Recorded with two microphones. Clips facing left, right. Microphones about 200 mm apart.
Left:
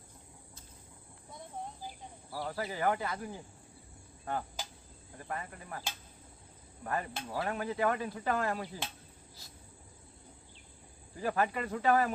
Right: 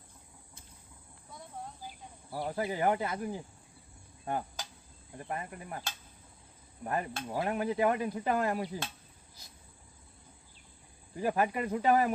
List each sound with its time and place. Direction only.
2.3 s speech: 20° right (ahead or behind)
5.1 s speech: 20° right (ahead or behind)
6.8 s speech: 20° right (ahead or behind)
11.2 s speech: 15° right (ahead or behind)